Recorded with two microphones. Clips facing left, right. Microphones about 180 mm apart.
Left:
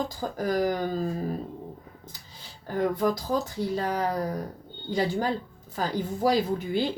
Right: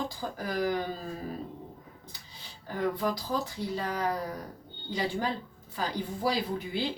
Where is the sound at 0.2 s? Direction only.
45° left (ahead or behind).